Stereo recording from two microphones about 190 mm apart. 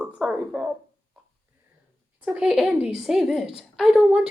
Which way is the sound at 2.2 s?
5° right (ahead or behind).